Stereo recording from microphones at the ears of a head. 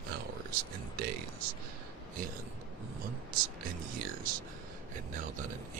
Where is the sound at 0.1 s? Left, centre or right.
Right.